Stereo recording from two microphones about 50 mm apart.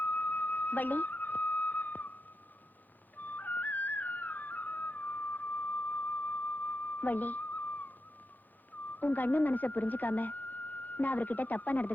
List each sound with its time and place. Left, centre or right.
0.0 s flute: left
3.2 s music: left
9.0 s speech: left